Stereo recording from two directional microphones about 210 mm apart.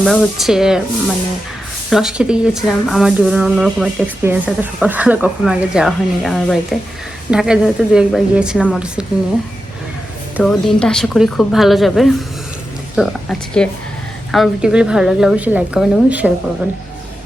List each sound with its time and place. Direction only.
0.0 s speech: 5° left (ahead or behind)
1.9 s speech: centre (ahead or behind)
10.3 s speech: centre (ahead or behind)